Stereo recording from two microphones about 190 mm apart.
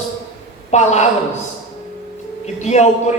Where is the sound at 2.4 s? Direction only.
35° left (ahead or behind).